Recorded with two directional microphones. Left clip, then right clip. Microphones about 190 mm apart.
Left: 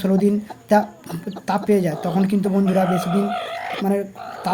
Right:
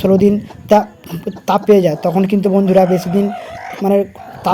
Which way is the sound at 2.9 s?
10° left (ahead or behind).